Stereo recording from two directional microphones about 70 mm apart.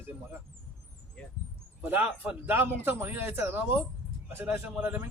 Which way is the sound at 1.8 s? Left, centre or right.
Right.